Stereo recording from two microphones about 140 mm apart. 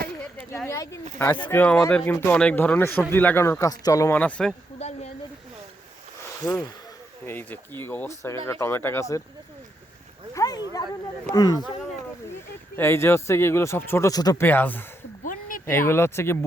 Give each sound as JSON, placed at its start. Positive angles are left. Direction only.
{"t": 0.5, "sound": "speech", "side_deg": 20}
{"t": 4.2, "sound": "speech", "side_deg": 5}
{"t": 4.8, "sound": "speech", "side_deg": 50}
{"t": 6.4, "sound": "speech", "side_deg": 30}
{"t": 7.3, "sound": "speech", "side_deg": 15}
{"t": 10.3, "sound": "speech", "side_deg": 25}
{"t": 12.7, "sound": "speech", "side_deg": 15}
{"t": 14.4, "sound": "speech", "side_deg": 15}
{"t": 15.2, "sound": "a sound", "side_deg": 75}
{"t": 15.6, "sound": "speech", "side_deg": 15}